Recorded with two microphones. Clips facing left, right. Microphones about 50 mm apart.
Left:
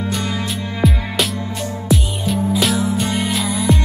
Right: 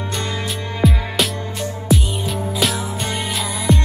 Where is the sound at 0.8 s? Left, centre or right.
Centre.